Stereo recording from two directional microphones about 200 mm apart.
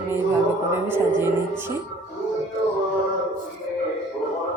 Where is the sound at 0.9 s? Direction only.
10° right (ahead or behind).